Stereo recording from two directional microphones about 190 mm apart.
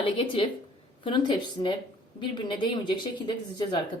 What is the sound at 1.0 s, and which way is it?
Speech, 25° left (ahead or behind).